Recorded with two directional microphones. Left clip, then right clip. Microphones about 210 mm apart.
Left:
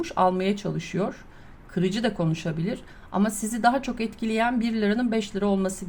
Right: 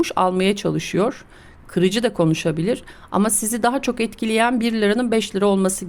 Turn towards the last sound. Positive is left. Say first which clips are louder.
# right 7 dB
turn(degrees=-45)  # may be behind; listen again after turning